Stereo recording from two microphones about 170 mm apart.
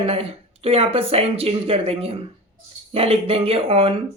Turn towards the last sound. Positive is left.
turn(degrees=-35)  # may be behind; listen again after turning